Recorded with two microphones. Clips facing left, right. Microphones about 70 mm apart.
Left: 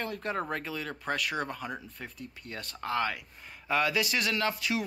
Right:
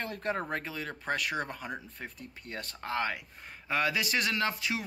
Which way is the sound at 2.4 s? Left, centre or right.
Right.